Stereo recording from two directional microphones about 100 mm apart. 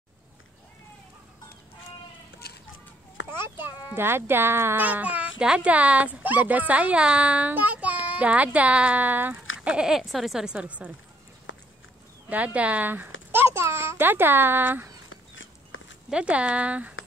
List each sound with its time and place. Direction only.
3.3 s a child's voice: 25° right (ahead or behind)
12.3 s a child's voice: 15° right (ahead or behind)
16.1 s a child's voice: 10° right (ahead or behind)